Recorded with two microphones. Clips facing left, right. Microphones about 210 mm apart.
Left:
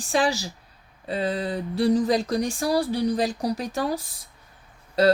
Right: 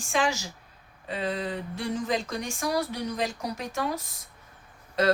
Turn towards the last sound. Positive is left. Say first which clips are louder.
# left 5 dB
turn(degrees=35)  # may be behind; listen again after turning